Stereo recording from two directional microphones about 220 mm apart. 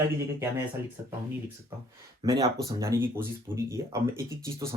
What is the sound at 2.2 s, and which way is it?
Speech, 20° right (ahead or behind).